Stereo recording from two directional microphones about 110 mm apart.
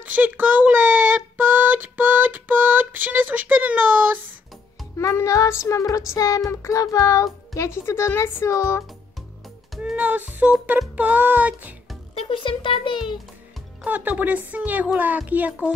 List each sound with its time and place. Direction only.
0.0 s a sound: 15° right (ahead or behind)
4.9 s music: 25° left (ahead or behind)
9.8 s music: 10° right (ahead or behind)
12.2 s speech: 55° left (ahead or behind)
13.8 s speech: 15° right (ahead or behind)